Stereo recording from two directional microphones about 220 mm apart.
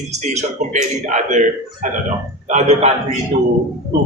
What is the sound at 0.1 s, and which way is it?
A man's voice, 30° right (ahead or behind).